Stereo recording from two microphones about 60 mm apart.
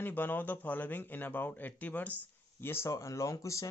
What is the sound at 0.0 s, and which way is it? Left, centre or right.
A man's voice, left.